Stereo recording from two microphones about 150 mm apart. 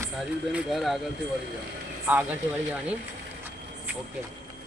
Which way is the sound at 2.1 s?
10° right (ahead or behind).